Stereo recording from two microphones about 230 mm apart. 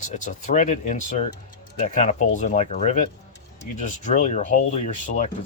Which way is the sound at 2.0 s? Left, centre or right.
Left.